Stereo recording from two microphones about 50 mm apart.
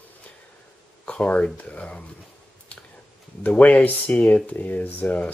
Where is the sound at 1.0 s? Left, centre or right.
Left.